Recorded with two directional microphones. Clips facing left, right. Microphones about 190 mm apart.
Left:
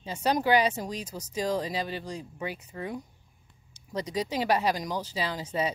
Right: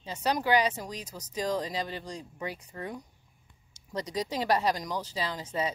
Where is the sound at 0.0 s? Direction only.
15° left (ahead or behind).